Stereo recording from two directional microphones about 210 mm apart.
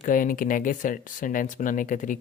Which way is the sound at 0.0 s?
40° left (ahead or behind).